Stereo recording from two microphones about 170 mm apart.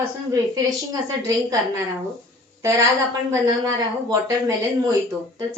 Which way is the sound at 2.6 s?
15° right (ahead or behind).